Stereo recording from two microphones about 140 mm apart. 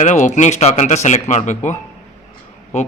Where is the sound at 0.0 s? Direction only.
60° left (ahead or behind).